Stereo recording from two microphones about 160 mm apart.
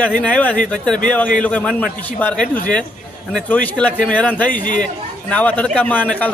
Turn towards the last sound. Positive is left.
turn(degrees=10)  # may be behind; listen again after turning